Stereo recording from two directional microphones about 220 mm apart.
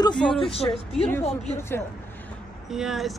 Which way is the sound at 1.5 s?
10° left (ahead or behind).